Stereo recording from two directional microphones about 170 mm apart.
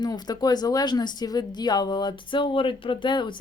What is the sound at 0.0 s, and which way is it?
Speech, 25° left (ahead or behind).